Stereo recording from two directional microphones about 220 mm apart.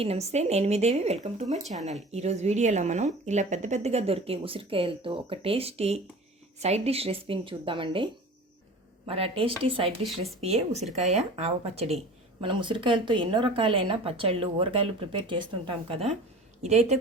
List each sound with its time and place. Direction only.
0.0 s a woman's voice: 30° right (ahead or behind)
1.6 s speech: centre (ahead or behind)
1.9 s a woman's voice: 30° right (ahead or behind)
10.0 s speech: centre (ahead or behind)
10.4 s a woman's voice: 30° right (ahead or behind)